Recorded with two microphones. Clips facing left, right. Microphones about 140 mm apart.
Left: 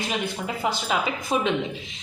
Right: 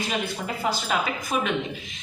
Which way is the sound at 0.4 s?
20° left (ahead or behind).